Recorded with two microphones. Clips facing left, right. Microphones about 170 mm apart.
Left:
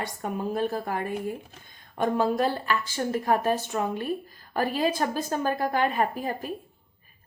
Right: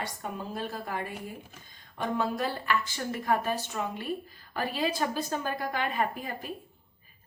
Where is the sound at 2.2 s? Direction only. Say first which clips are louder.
Left 5 dB; 35° left (ahead or behind).